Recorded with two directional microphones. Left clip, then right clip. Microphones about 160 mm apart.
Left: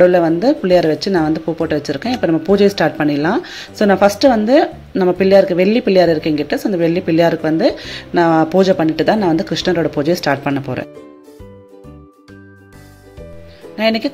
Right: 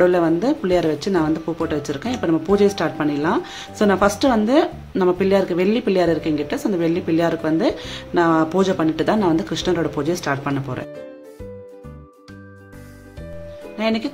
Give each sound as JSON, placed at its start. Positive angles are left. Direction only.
{"t": 0.0, "sound": "speech", "side_deg": 10}
{"t": 13.7, "sound": "speech", "side_deg": 20}